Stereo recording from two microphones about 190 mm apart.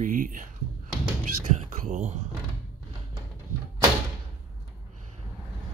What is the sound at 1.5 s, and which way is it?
Speech, 40° right (ahead or behind).